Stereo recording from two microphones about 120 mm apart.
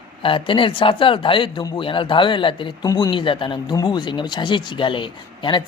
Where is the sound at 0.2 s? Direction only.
45° left (ahead or behind).